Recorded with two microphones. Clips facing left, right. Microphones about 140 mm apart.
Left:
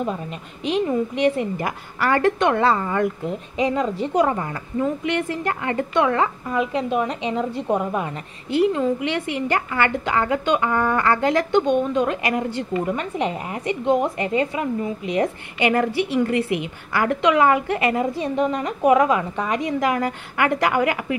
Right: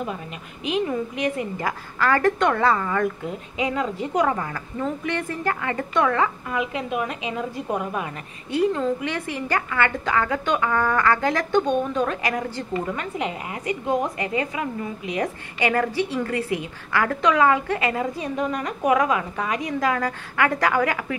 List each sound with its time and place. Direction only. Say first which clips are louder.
0.7 s a woman's voice: left 3 dB; 30° left (ahead or behind)